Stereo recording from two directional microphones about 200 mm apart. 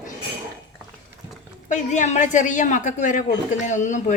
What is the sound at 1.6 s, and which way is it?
A woman's voice, 40° left (ahead or behind).